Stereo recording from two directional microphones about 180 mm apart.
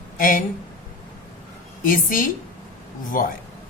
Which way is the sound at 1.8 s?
50° left (ahead or behind).